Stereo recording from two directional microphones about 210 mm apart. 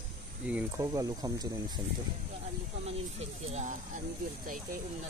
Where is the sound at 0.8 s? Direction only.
15° right (ahead or behind).